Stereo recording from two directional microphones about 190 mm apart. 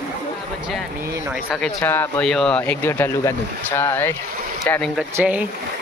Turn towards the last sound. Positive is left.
turn(degrees=-10)  # may be behind; listen again after turning